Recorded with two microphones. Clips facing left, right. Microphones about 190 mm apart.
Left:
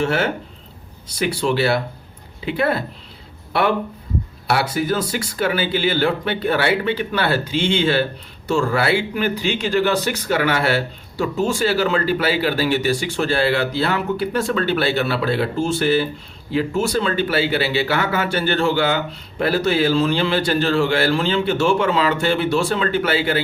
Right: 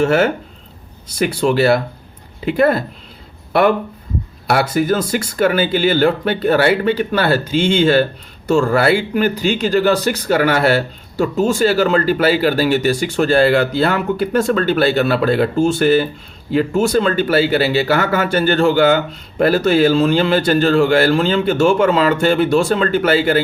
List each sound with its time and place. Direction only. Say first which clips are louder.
0.0 s speech: right 6 dB; 50° right (ahead or behind)
4.4 s speech: right 5 dB; 45° right (ahead or behind)